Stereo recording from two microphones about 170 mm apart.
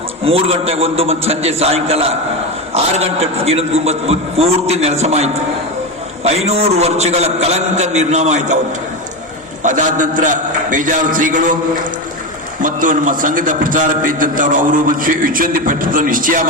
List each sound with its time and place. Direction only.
0.3 s a man's voice: 35° right (ahead or behind)
9.6 s a man's voice: 50° right (ahead or behind)
12.6 s a man's voice: 50° right (ahead or behind)